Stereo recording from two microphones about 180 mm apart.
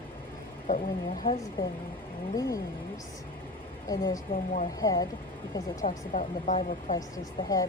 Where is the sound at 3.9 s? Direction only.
20° left (ahead or behind).